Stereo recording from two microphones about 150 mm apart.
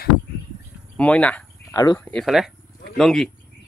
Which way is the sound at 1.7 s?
25° left (ahead or behind).